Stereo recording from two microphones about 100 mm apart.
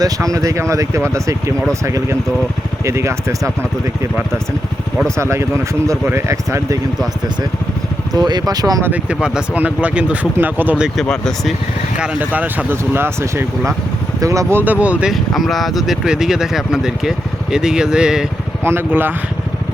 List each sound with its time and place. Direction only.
0.3 s speech: 30° right (ahead or behind)
5.1 s speech: 30° right (ahead or behind)
8.1 s speech: 45° right (ahead or behind)
8.8 s speech: 15° right (ahead or behind)
11.0 s speech: 5° left (ahead or behind)
11.9 s speech: 15° right (ahead or behind); by 14.6 s 30° right (ahead or behind)
14.6 s speech: 15° right (ahead or behind)
15.1 s speech: centre (ahead or behind)
18.6 s speech: 25° right (ahead or behind)